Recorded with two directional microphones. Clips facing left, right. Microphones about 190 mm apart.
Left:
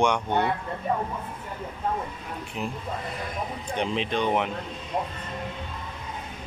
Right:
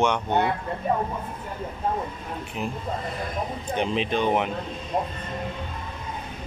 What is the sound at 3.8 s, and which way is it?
Speech, 5° right (ahead or behind).